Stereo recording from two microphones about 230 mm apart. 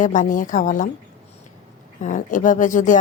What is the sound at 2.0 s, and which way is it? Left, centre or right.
Speech, left.